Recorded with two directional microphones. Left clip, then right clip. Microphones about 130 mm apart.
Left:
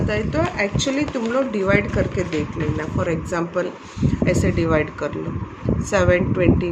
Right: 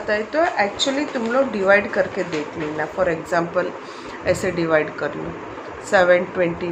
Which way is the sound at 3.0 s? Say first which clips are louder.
Right 4 dB; 35° left (ahead or behind).